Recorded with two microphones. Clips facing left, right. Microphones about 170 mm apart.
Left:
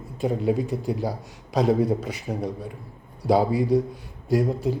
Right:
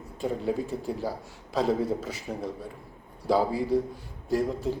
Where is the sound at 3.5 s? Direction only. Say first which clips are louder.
Left 5 dB; 15° left (ahead or behind).